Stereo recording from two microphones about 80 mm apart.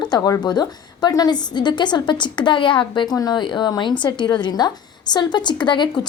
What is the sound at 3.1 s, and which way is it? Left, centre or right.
A woman's voice, left.